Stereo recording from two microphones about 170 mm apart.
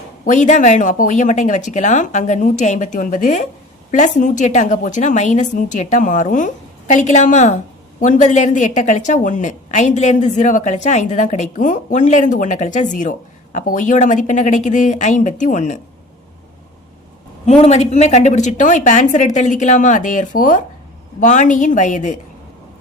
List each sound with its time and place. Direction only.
0.3 s a woman's voice: 45° left (ahead or behind)
17.4 s a woman's voice: 40° left (ahead or behind)